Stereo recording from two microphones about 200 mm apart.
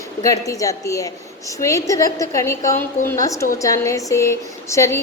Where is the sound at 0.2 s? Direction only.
15° left (ahead or behind).